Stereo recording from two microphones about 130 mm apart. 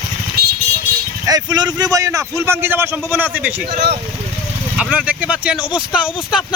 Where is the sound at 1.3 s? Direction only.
30° right (ahead or behind); by 3.7 s 10° right (ahead or behind).